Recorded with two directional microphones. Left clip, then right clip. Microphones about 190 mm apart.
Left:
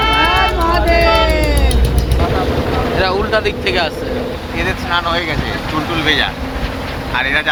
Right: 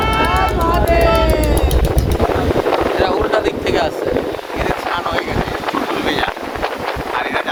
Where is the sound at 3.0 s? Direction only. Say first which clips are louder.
Even; 25° right (ahead or behind).